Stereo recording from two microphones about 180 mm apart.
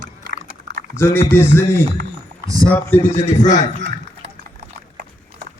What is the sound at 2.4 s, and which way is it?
Speech, 20° right (ahead or behind).